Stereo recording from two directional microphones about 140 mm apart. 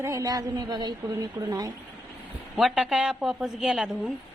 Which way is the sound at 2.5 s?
Centre (ahead or behind).